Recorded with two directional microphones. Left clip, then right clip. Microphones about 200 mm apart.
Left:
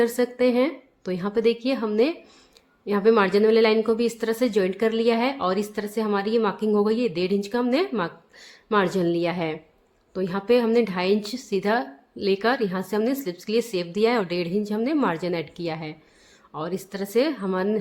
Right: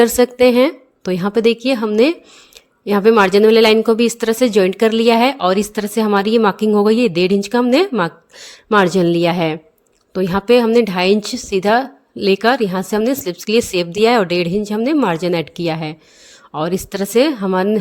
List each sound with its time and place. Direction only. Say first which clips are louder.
0.0 s a woman's voice: right 10 dB; 45° right (ahead or behind)